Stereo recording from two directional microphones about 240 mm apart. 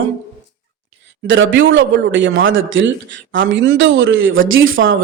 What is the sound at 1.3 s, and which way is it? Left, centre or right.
A man's voice, right.